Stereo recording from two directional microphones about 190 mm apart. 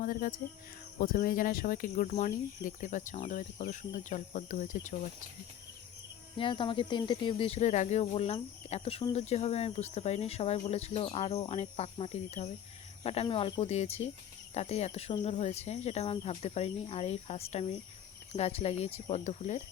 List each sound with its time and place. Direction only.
0.0 s speech: 50° left (ahead or behind)
6.3 s speech: 25° left (ahead or behind)